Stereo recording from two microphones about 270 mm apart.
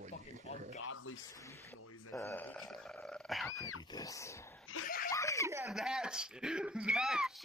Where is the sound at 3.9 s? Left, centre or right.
Centre.